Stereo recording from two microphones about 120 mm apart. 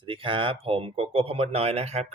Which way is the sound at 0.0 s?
45° right (ahead or behind).